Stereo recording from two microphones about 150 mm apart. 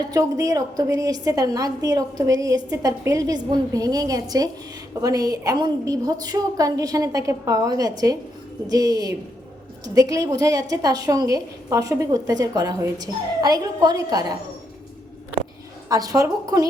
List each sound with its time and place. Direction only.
0.1 s a woman's voice: 25° right (ahead or behind)
15.9 s a woman's voice: 25° right (ahead or behind)